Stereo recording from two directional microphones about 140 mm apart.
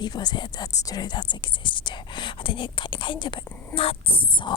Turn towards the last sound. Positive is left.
turn(degrees=35)  # may be behind; listen again after turning